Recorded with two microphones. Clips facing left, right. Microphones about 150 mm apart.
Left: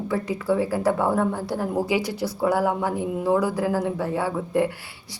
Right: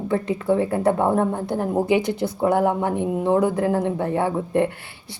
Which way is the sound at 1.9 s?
55° right (ahead or behind).